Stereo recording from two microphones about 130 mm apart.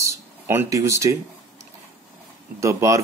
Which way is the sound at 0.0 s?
20° right (ahead or behind).